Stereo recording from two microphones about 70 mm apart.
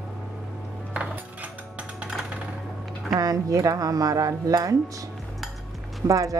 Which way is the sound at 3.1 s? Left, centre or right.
Right.